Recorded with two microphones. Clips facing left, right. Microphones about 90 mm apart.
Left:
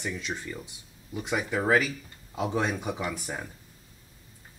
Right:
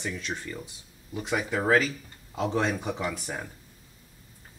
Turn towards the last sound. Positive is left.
turn(degrees=0)  # may be behind; listen again after turning